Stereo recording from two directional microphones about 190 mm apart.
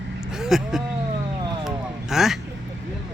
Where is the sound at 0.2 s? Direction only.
5° right (ahead or behind).